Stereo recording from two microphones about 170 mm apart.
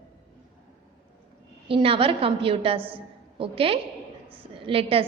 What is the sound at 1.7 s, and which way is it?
A woman's voice, 30° right (ahead or behind).